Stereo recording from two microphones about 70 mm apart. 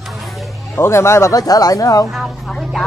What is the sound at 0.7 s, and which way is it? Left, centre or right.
Speech, left.